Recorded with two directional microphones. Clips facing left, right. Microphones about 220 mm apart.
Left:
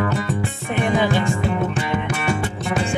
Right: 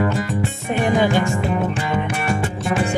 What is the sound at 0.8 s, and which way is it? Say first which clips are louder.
Music: right 2 dB; 45° right (ahead or behind).